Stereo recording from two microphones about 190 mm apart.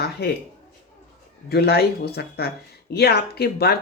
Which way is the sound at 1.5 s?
55° left (ahead or behind).